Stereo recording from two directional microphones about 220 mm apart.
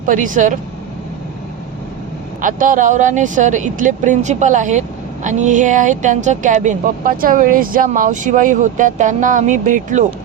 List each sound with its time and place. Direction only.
0.0 s speech: 35° right (ahead or behind)
2.4 s speech: 35° right (ahead or behind)